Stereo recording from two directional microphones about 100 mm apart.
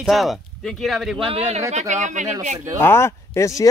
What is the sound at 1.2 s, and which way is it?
Speech, 80° right.